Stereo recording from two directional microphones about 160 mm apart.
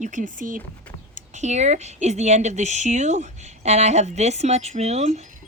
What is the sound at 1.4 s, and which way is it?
Speech, 45° right (ahead or behind).